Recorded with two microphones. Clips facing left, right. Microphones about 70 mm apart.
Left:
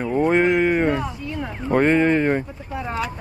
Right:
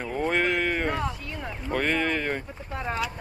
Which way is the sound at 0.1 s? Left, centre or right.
Left.